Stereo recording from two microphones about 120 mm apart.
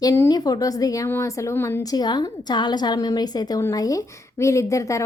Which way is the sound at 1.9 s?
35° left (ahead or behind).